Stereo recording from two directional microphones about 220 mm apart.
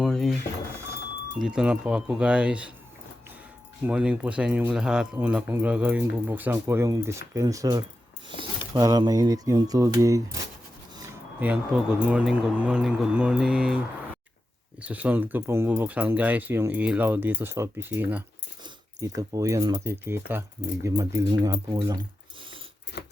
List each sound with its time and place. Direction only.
0.0 s a sound: centre (ahead or behind)
1.4 s speech: 5° right (ahead or behind)
3.8 s speech: 5° right (ahead or behind)
14.8 s speech: 5° right (ahead or behind)
22.9 s keys jangling: 50° left (ahead or behind)